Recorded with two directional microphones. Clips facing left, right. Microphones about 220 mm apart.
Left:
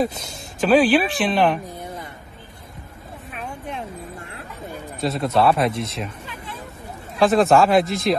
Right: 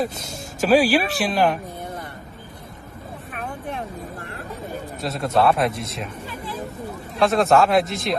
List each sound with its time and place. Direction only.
0.0 s speech: centre (ahead or behind)
5.0 s speech: centre (ahead or behind)
6.2 s a sound: 45° right (ahead or behind)
7.2 s speech: centre (ahead or behind)